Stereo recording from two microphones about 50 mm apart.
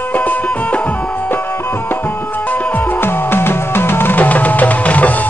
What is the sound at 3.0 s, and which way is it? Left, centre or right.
Music, left.